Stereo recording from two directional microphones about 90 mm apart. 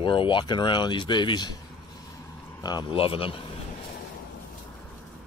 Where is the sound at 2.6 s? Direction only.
50° left (ahead or behind).